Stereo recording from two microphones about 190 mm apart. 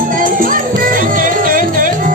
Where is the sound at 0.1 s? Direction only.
45° right (ahead or behind).